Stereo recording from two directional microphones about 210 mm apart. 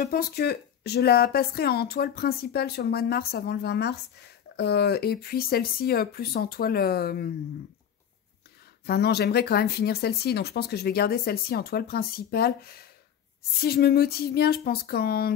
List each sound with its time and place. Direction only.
0.0 s speech: 45° left (ahead or behind)
8.8 s speech: 50° left (ahead or behind)